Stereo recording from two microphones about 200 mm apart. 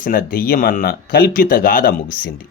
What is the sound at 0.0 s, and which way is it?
Speech, 45° left (ahead or behind).